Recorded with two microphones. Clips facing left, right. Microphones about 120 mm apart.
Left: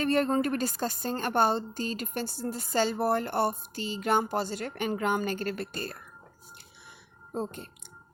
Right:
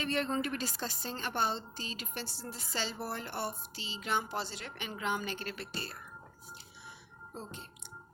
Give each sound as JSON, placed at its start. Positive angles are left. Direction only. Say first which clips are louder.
{"t": 0.0, "sound": "a woman's voice", "louder": "left 8 dB", "side_deg": 45}
{"t": 7.3, "sound": "a woman's voice", "louder": "left 11 dB", "side_deg": 50}